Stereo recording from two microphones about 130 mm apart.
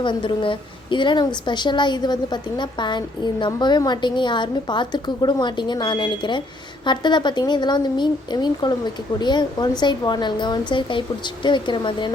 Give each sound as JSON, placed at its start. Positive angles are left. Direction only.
{"t": 0.0, "sound": "a woman's voice", "side_deg": 40}